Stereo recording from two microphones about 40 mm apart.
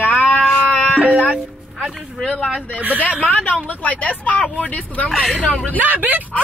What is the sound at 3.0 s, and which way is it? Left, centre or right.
Speech, left.